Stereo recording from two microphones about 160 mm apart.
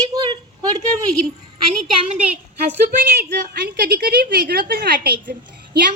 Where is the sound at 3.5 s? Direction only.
70° right (ahead or behind).